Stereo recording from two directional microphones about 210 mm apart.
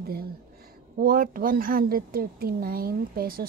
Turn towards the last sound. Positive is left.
turn(degrees=-45)  # may be behind; listen again after turning